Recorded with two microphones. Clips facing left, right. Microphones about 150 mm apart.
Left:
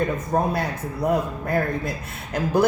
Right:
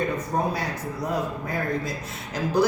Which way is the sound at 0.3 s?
45° left (ahead or behind).